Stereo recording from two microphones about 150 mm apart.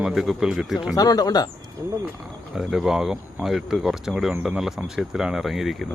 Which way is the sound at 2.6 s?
Centre (ahead or behind).